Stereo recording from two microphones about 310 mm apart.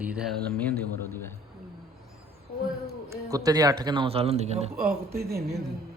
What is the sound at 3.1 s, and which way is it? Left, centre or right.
Speech, centre.